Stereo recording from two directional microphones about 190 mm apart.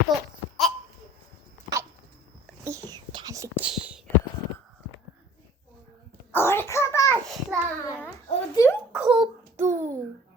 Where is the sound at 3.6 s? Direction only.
5° right (ahead or behind).